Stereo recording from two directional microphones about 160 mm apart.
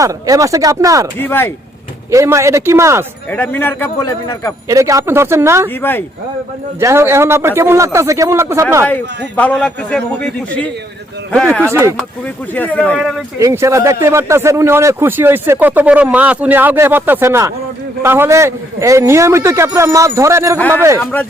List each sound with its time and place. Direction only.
0.0 s speech: 20° right (ahead or behind)
1.2 s a man's voice: 15° left (ahead or behind)
2.0 s speech: 15° right (ahead or behind)
3.2 s a man's voice: 10° left (ahead or behind)
4.7 s speech: 20° right (ahead or behind)
6.7 s speech: 15° right (ahead or behind)
8.9 s a man's voice: 10° left (ahead or behind)
11.6 s speech: 15° right (ahead or behind)
12.5 s a man's voice: 10° left (ahead or behind)
13.4 s speech: 20° right (ahead or behind)
21.0 s a man's voice: 10° left (ahead or behind)